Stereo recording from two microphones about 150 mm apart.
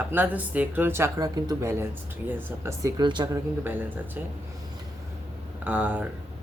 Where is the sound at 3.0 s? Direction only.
30° right (ahead or behind).